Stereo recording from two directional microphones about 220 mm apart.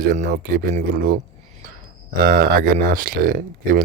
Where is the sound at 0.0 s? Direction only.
45° right (ahead or behind).